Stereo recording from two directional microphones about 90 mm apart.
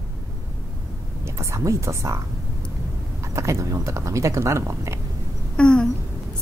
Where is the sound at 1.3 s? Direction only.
35° right (ahead or behind).